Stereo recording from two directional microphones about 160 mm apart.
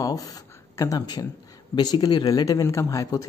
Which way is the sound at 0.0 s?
20° left (ahead or behind).